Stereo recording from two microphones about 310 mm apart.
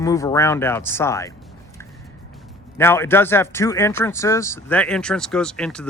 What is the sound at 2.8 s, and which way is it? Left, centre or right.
A man's voice, centre.